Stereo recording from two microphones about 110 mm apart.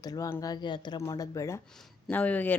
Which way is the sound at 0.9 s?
30° left (ahead or behind).